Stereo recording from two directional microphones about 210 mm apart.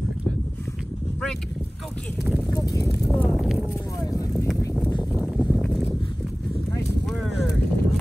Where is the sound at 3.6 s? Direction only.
10° left (ahead or behind).